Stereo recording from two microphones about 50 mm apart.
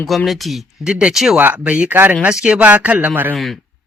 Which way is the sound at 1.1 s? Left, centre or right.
Centre.